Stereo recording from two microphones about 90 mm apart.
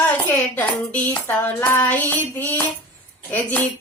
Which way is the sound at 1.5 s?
20° left (ahead or behind).